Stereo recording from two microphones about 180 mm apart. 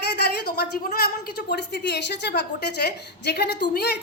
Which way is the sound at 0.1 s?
65° left (ahead or behind).